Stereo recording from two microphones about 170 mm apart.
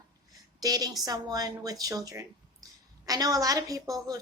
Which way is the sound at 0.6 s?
20° right (ahead or behind).